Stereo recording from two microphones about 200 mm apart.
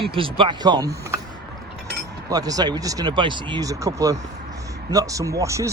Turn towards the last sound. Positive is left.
turn(degrees=-15)  # may be behind; listen again after turning